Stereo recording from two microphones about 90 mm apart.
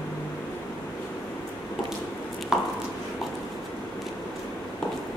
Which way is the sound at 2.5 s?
5° right (ahead or behind).